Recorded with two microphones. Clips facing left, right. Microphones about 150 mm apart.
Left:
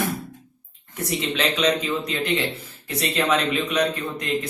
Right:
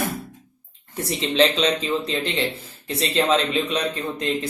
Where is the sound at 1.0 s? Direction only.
30° right (ahead or behind).